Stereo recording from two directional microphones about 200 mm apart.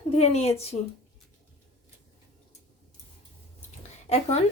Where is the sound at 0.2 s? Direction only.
30° left (ahead or behind).